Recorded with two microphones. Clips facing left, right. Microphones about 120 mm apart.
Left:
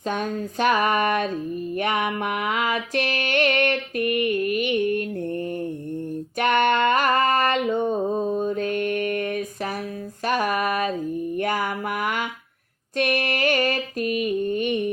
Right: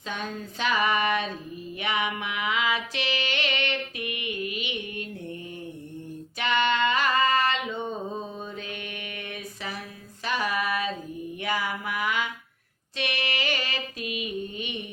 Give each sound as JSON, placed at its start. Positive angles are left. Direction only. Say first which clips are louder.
{"t": 0.1, "sound": "music", "louder": "left 7 dB", "side_deg": 50}
{"t": 6.4, "sound": "a sound", "louder": "left 5 dB", "side_deg": 50}
{"t": 11.3, "sound": "music", "louder": "left 3 dB", "side_deg": 50}